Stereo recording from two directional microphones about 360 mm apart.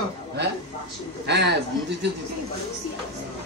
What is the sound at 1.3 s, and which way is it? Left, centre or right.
Speech, right.